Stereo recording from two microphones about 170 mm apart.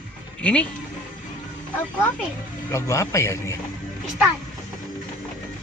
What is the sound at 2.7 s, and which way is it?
Speech, 15° left (ahead or behind).